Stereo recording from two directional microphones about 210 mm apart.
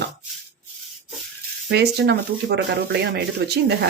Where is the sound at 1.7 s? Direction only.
55° right (ahead or behind).